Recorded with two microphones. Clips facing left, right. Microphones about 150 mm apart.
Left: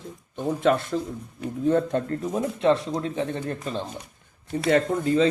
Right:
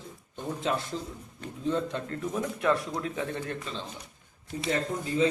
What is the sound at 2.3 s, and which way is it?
Speech, 30° left (ahead or behind).